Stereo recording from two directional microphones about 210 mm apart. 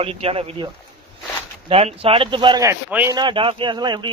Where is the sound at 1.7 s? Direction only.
25° right (ahead or behind); by 3.0 s 10° right (ahead or behind).